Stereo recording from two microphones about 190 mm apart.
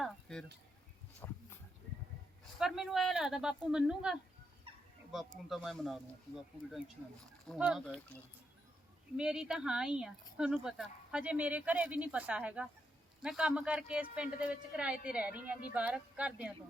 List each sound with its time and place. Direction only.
0.0 s a sound: 5° left (ahead or behind)
1.2 s speech: 15° left (ahead or behind)
2.6 s speech: 5° right (ahead or behind)
4.7 s fowl: 30° right (ahead or behind)
5.5 s speech: centre (ahead or behind)
7.4 s speech: centre (ahead or behind)